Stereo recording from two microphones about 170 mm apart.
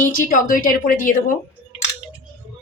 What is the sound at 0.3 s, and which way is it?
Speech, 50° left (ahead or behind).